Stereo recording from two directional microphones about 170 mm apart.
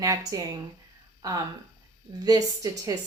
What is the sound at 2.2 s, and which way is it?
Speech, 20° right (ahead or behind).